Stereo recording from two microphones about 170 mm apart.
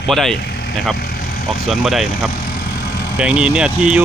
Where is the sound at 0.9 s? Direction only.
65° left (ahead or behind).